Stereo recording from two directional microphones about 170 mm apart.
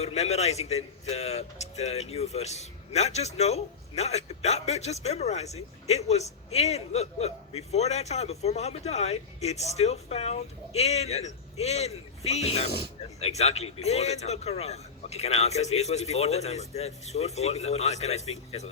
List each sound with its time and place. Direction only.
0.0 s speech: 40° left (ahead or behind)